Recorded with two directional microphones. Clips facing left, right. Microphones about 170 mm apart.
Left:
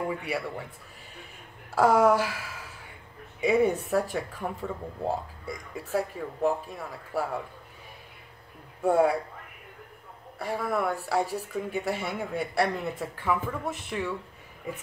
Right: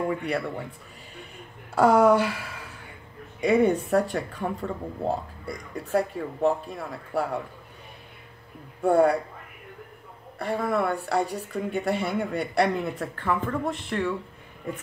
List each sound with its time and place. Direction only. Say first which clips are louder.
0.2 s speech: right 4 dB; 5° left (ahead or behind)
1.8 s speech: right 3 dB; 5° left (ahead or behind)
8.8 s speech: right 3 dB; 5° left (ahead or behind)
10.4 s speech: right 3 dB; centre (ahead or behind)